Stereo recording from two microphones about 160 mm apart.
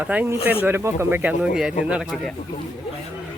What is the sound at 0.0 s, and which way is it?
Speech, 10° right (ahead or behind).